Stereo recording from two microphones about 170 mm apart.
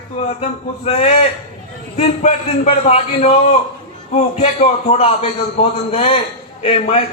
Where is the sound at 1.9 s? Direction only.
40° left (ahead or behind).